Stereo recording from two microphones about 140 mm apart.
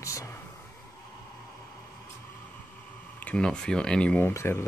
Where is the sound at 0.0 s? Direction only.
20° left (ahead or behind).